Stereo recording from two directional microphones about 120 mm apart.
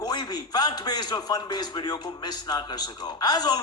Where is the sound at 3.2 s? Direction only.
35° left (ahead or behind).